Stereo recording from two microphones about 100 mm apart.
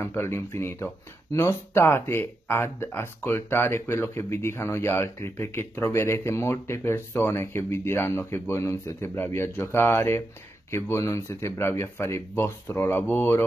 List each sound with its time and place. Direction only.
0.0 s speech: 25° left (ahead or behind)